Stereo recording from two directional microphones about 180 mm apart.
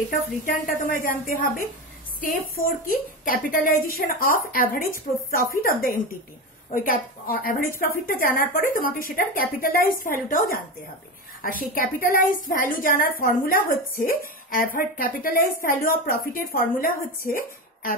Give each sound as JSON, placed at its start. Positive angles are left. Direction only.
{"t": 0.5, "sound": "a woman's voice", "side_deg": 50}
{"t": 11.4, "sound": "a woman's voice", "side_deg": 50}